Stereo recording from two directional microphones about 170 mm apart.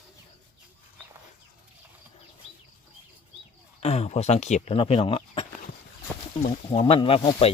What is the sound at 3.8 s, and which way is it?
Speech, 40° left (ahead or behind).